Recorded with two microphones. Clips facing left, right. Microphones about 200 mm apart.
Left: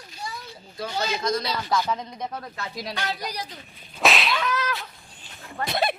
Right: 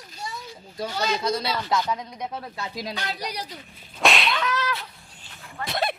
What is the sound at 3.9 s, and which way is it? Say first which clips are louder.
Whip: even; centre (ahead or behind).